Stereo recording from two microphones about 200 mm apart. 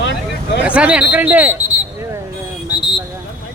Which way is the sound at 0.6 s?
5° right (ahead or behind).